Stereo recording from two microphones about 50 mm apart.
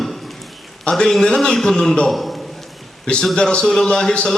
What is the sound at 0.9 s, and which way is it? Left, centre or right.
A man's voice, centre.